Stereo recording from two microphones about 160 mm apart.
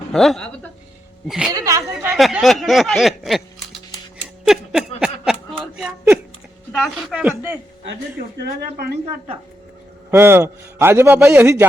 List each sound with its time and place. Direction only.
0.1 s speech: centre (ahead or behind)
1.5 s a woman's voice: 20° right (ahead or behind)
2.1 s speech: centre (ahead or behind)
4.4 s a sound: 5° right (ahead or behind)
6.8 s speech: centre (ahead or behind)
8.4 s speech: 90° right
10.1 s a man's voice: 15° right (ahead or behind)